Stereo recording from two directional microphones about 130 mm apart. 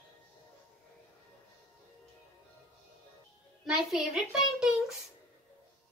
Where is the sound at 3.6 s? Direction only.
5° right (ahead or behind).